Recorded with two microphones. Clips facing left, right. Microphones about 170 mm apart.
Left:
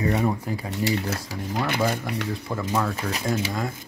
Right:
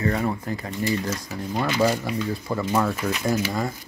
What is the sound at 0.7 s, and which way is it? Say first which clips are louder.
Speech: even; 75° left (ahead or behind).